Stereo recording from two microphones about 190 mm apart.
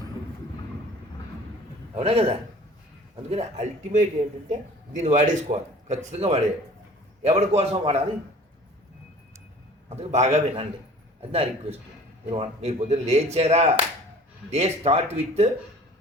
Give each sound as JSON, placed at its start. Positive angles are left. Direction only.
{"t": 2.0, "sound": "a man's voice", "side_deg": -30}
{"t": 9.9, "sound": "a man's voice", "side_deg": -35}